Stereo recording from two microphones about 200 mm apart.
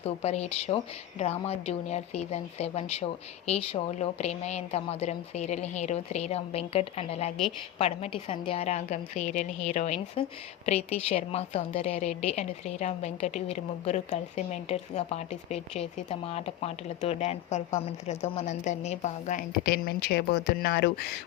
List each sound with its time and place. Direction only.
0.0 s a woman's voice: 30° left (ahead or behind); by 21.1 s 55° left (ahead or behind)